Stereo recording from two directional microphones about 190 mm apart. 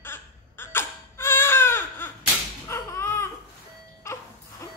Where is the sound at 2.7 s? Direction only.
15° left (ahead or behind).